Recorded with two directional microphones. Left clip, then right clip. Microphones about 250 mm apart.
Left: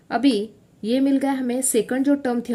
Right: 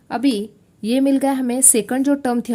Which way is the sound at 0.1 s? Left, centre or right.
Right.